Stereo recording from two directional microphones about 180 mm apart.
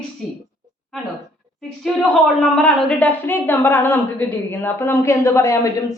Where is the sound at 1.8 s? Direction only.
Centre (ahead or behind).